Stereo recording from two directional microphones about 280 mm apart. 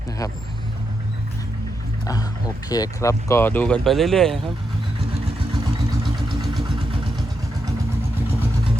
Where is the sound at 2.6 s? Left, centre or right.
Centre.